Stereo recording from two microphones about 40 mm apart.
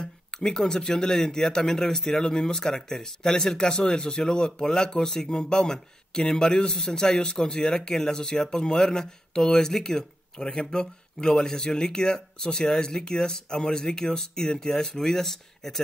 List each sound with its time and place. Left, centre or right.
0.0 s speech: centre